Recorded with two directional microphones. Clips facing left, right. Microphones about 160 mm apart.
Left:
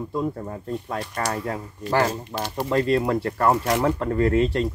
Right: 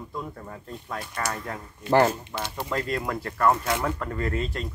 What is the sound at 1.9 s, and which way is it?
Speech, 25° right (ahead or behind).